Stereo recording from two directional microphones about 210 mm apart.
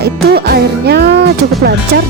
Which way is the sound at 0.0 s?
50° right (ahead or behind).